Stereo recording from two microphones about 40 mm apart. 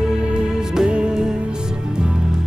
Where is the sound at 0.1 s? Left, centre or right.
Right.